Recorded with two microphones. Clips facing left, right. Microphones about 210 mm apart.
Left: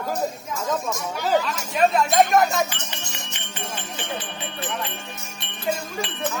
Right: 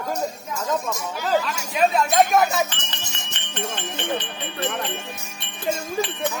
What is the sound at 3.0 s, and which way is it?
Music, 20° right (ahead or behind).